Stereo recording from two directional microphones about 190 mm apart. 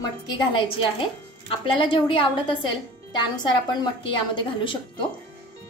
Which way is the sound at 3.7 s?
25° left (ahead or behind).